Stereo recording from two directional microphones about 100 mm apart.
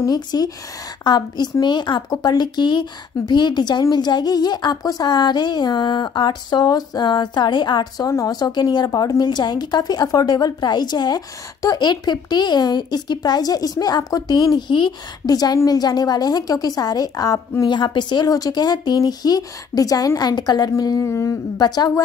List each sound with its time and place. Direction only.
0.0 s a woman's voice: 40° left (ahead or behind)
14.7 s a woman's voice: 50° left (ahead or behind)
21.1 s humming: 30° left (ahead or behind)
21.5 s speech: 45° left (ahead or behind)